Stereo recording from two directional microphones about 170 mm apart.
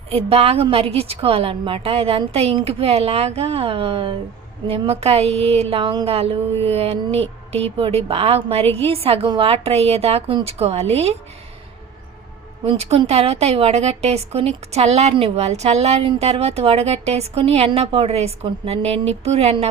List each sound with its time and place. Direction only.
0.1 s a woman's voice: 35° right (ahead or behind)
12.6 s a woman's voice: 35° right (ahead or behind)